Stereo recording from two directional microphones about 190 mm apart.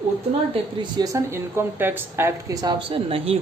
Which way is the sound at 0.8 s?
20° right (ahead or behind).